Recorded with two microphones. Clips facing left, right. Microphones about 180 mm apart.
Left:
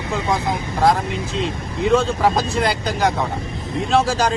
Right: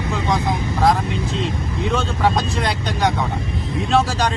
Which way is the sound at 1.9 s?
Centre (ahead or behind).